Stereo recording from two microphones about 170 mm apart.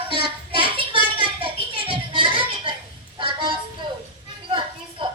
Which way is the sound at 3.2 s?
30° right (ahead or behind).